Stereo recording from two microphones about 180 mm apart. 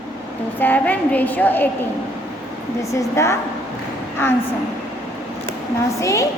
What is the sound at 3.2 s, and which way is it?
Speech, 15° left (ahead or behind).